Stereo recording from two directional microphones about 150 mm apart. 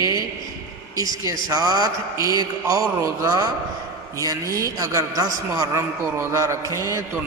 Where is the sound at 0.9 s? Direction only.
25° right (ahead or behind).